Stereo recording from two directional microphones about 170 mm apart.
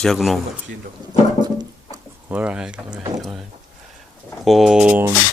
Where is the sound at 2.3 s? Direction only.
5° right (ahead or behind).